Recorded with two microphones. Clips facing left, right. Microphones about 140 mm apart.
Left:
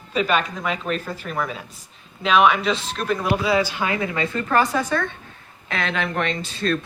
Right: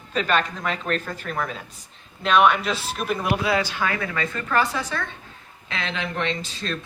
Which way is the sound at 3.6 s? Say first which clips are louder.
Left 3 dB; 15° left (ahead or behind).